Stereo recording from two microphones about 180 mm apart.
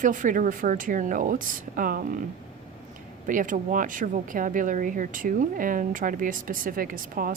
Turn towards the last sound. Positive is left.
turn(degrees=-50)  # may be behind; listen again after turning